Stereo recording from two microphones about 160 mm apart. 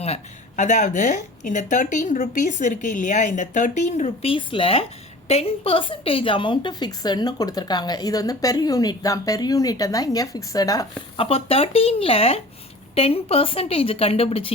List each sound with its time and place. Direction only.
0.0 s a woman's voice: 45° left (ahead or behind); by 10.8 s 20° left (ahead or behind)
11.2 s a woman's voice: 35° left (ahead or behind)